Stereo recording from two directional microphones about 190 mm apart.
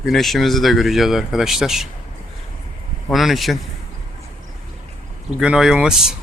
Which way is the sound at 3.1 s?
Centre (ahead or behind).